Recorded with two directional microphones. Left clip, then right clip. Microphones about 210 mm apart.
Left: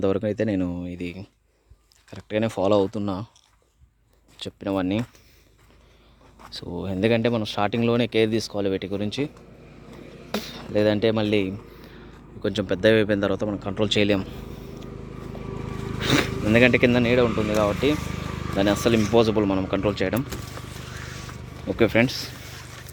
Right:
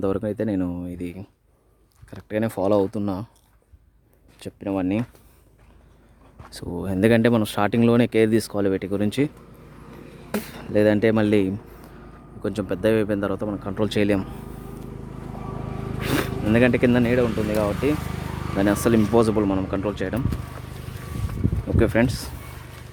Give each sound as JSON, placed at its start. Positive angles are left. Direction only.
{"t": 0.0, "sound": "speech", "side_deg": 0}
{"t": 4.4, "sound": "speech", "side_deg": 0}
{"t": 6.6, "sound": "speech", "side_deg": -20}
{"t": 9.0, "sound": "speech", "side_deg": -35}
{"t": 10.3, "sound": "speech", "side_deg": -20}
{"t": 12.4, "sound": "speech", "side_deg": 0}
{"t": 16.0, "sound": "a sound", "side_deg": 15}
{"t": 16.2, "sound": "speech", "side_deg": -5}
{"t": 19.4, "sound": "speech", "side_deg": -5}
{"t": 21.8, "sound": "speech", "side_deg": -5}